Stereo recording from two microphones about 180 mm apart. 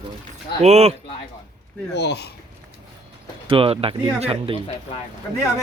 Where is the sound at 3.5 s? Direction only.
30° right (ahead or behind).